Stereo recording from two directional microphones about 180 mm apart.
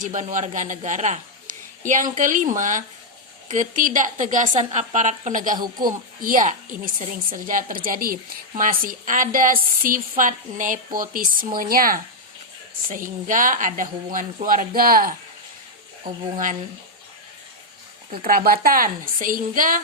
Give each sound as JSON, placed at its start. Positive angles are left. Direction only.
{"t": 0.0, "sound": "a woman's voice", "side_deg": -45}
{"t": 5.6, "sound": "speech", "side_deg": -25}
{"t": 6.2, "sound": "a woman's voice", "side_deg": -45}
{"t": 16.1, "sound": "speech", "side_deg": -25}
{"t": 18.3, "sound": "a woman's voice", "side_deg": -55}